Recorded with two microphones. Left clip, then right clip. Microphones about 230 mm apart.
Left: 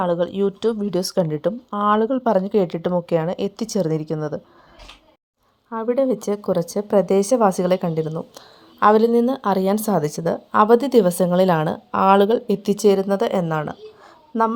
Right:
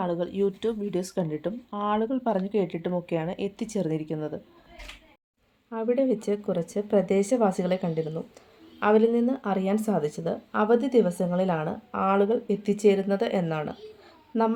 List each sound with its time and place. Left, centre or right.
0.0 s speech: left
5.7 s speech: left